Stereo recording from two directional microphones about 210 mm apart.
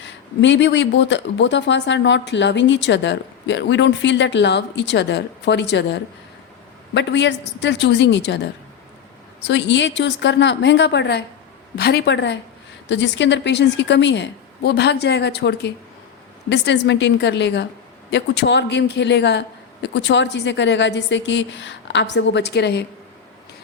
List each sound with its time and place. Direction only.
0.0 s speech: 60° left (ahead or behind)